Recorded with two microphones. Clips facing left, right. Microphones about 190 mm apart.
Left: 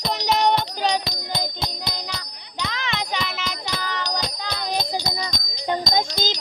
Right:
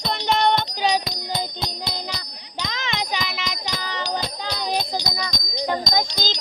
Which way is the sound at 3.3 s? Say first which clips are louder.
Even; centre (ahead or behind).